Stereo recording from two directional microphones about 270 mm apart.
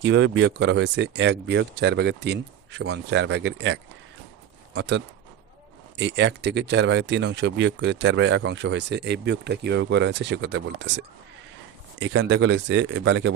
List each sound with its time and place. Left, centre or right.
0.0 s speech: right